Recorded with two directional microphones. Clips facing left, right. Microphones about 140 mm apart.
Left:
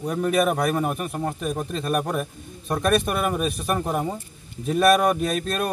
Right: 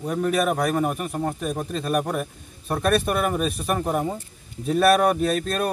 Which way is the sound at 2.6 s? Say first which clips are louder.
Even; centre (ahead or behind).